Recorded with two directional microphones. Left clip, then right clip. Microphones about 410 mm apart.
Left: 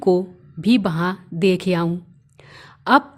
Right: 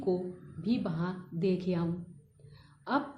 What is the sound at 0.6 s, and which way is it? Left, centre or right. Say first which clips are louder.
A woman's voice: left 15 dB; left.